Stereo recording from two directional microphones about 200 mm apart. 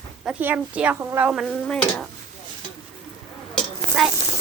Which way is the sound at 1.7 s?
5° left (ahead or behind).